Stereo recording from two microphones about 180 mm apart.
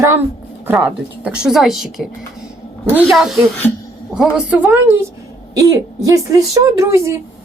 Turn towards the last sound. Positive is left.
turn(degrees=-15)  # may be behind; listen again after turning